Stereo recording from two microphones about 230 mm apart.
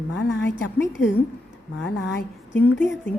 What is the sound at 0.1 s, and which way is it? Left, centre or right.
A woman's voice, left.